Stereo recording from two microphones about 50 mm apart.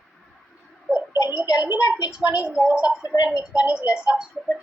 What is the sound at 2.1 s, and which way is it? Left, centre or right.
Speech, right.